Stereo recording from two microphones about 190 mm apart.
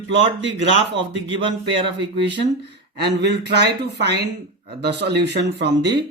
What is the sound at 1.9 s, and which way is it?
Speech, 70° right (ahead or behind).